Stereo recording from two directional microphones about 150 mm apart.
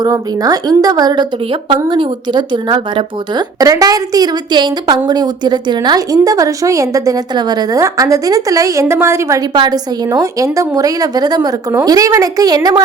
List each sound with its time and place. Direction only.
0.0 s speech: 25° right (ahead or behind)